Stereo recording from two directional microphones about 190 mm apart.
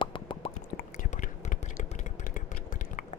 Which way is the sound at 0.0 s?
25° left (ahead or behind).